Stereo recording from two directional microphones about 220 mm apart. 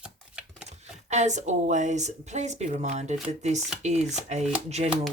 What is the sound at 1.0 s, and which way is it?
Speech, 30° right (ahead or behind).